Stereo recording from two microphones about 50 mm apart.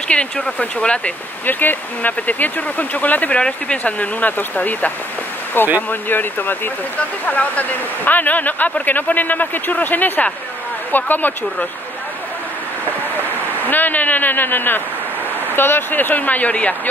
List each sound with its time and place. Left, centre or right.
0.1 s speech: left
1.4 s speech: left
3.3 s speech: left
13.7 s speech: left